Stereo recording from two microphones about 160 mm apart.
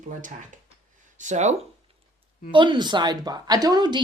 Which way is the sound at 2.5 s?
30° right (ahead or behind).